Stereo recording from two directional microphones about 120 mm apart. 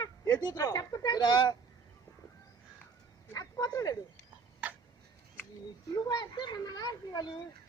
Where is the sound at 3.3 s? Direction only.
30° left (ahead or behind).